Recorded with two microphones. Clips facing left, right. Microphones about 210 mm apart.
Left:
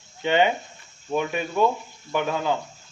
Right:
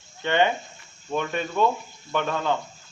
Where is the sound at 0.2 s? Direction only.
15° left (ahead or behind).